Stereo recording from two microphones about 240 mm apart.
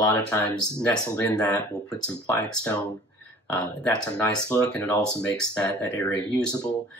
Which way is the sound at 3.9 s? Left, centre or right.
Centre.